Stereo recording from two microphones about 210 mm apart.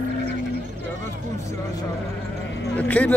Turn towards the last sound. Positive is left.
turn(degrees=5)  # may be behind; listen again after turning